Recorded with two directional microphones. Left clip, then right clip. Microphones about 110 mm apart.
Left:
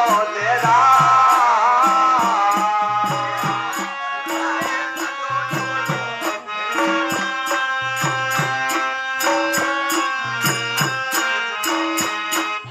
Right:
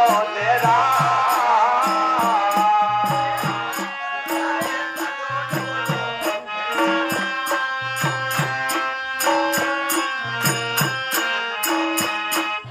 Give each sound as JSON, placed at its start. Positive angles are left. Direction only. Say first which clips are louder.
{"t": 0.0, "sound": "music", "louder": "even", "side_deg": -30}
{"t": 6.8, "sound": "music", "louder": "left 1 dB", "side_deg": -30}